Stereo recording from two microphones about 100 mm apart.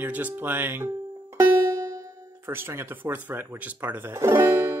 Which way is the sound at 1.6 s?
35° right (ahead or behind).